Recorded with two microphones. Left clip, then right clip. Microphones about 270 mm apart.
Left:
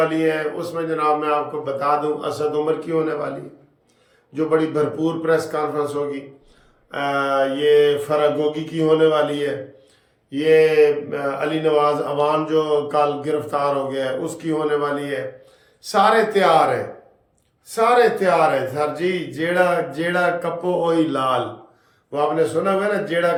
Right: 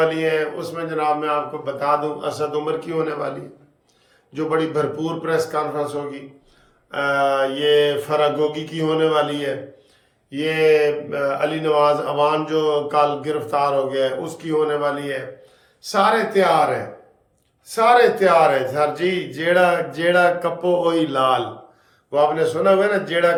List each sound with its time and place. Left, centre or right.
0.0 s speech: centre
4.4 s speech: centre
17.7 s speech: centre